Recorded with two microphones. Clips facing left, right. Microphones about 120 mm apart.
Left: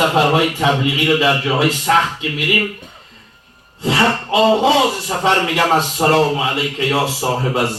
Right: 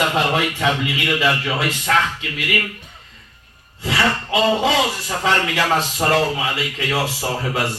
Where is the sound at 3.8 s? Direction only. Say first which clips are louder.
Left 4 dB; 30° left (ahead or behind).